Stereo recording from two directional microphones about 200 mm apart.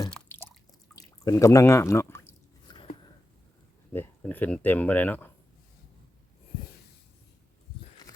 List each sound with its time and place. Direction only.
0.1 s drip: 10° left (ahead or behind)
0.9 s a sound: 15° left (ahead or behind)
3.9 s speech: 10° left (ahead or behind)